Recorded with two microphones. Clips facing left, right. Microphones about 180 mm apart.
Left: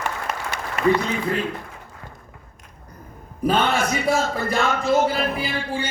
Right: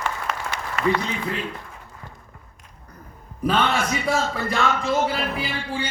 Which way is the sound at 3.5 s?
45° left (ahead or behind).